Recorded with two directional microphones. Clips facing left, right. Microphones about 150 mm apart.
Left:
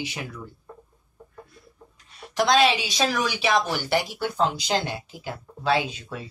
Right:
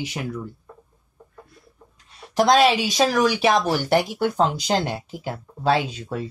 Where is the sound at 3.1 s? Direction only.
40° right (ahead or behind).